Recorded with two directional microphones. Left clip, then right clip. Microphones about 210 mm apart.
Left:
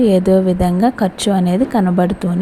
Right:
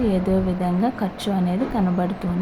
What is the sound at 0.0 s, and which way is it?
A woman's voice, 30° left (ahead or behind).